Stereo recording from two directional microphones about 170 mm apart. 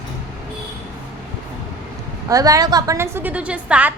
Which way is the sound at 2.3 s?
20° right (ahead or behind).